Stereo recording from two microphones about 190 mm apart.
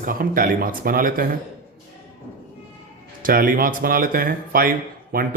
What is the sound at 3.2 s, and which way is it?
Speech, 45° right (ahead or behind).